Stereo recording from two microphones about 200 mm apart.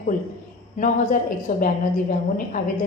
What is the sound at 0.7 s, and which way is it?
A woman's voice, 40° left (ahead or behind).